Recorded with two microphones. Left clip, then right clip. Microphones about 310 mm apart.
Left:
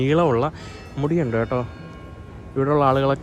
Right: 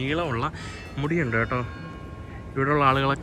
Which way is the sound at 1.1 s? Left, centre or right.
Centre.